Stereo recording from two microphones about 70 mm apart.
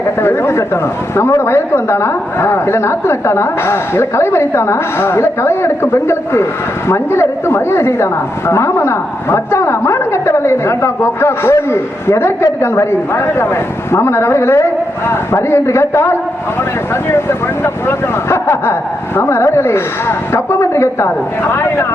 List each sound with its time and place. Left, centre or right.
0.0 s a woman's voice: left